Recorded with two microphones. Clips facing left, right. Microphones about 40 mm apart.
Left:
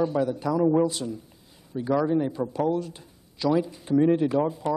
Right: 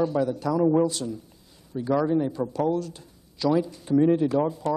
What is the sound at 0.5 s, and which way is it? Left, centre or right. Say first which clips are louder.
Speech: even; centre.